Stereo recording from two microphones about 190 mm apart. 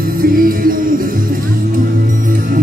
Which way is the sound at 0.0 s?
50° right (ahead or behind).